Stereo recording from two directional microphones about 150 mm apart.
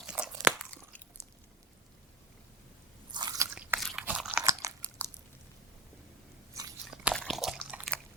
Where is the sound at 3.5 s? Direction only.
10° right (ahead or behind).